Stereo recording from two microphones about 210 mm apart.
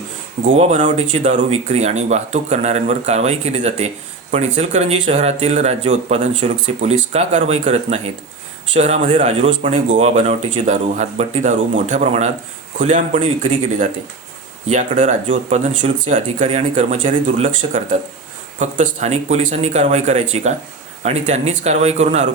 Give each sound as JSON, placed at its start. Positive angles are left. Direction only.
{"t": 0.5, "sound": "speech", "side_deg": -35}